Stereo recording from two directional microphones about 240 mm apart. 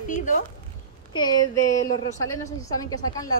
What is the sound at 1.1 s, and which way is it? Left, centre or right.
Speech, centre.